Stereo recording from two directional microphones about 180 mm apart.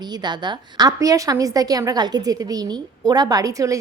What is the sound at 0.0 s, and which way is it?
A woman's voice, 25° right (ahead or behind).